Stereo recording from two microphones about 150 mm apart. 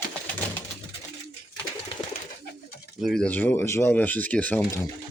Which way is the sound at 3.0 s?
5° left (ahead or behind).